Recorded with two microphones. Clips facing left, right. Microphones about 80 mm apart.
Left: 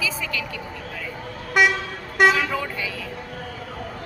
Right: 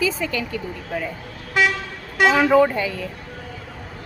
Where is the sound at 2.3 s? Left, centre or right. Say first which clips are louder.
Right 8 dB; right.